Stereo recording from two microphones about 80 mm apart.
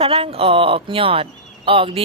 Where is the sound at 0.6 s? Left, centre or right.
Right.